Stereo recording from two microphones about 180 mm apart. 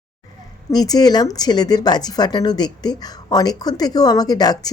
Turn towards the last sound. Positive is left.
turn(degrees=20)  # may be behind; listen again after turning